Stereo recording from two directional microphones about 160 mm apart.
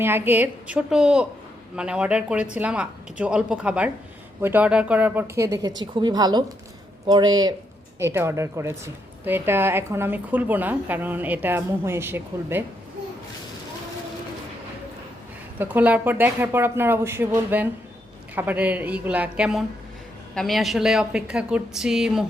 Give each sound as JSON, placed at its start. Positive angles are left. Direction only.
{"t": 0.0, "sound": "a woman's voice", "side_deg": -10}
{"t": 7.9, "sound": "a woman's voice", "side_deg": -15}
{"t": 15.5, "sound": "a woman's voice", "side_deg": -10}